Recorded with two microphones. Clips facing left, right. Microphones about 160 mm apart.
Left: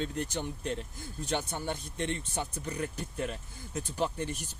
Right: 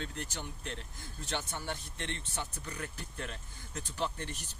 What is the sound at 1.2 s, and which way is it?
Speech, 15° left (ahead or behind).